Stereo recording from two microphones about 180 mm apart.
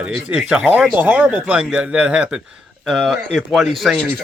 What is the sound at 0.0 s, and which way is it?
Speech, 5° right (ahead or behind).